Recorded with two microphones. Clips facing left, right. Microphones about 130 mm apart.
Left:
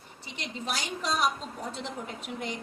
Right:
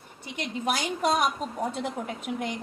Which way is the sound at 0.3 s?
55° right (ahead or behind).